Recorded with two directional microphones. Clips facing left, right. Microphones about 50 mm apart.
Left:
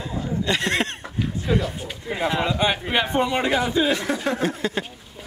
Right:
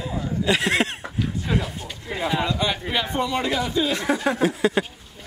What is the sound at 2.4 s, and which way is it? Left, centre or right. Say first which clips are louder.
A man's voice: left 2 dB; left.